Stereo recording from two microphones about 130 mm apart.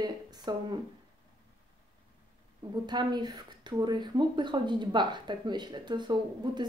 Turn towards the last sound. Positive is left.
turn(degrees=-35)  # may be behind; listen again after turning